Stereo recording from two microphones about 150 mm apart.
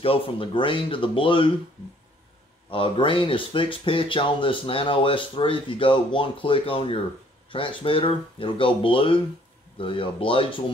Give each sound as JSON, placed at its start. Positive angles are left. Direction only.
{"t": 0.0, "sound": "speech", "side_deg": 35}
{"t": 2.7, "sound": "speech", "side_deg": 35}